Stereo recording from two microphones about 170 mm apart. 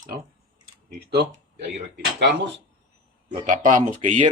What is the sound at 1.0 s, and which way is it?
Speech, 70° right (ahead or behind).